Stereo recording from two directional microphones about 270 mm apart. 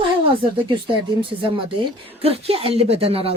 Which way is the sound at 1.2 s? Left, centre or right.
Centre.